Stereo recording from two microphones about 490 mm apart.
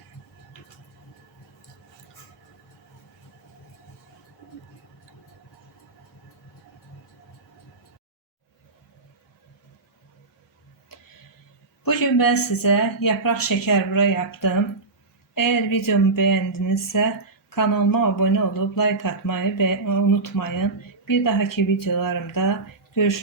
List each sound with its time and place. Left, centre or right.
11.9 s speech: left